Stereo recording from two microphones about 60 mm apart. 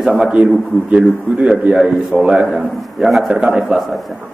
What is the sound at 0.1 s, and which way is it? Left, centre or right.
A man's voice, centre.